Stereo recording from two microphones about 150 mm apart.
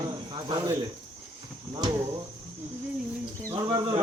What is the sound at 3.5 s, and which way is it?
Speech, 25° right (ahead or behind).